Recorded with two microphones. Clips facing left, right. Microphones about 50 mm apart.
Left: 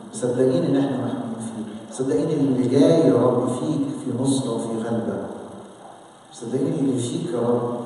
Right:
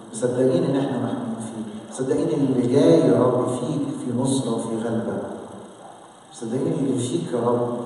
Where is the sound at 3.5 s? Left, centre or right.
Right.